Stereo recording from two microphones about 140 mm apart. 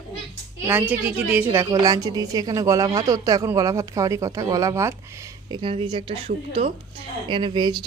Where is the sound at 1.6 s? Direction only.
30° right (ahead or behind).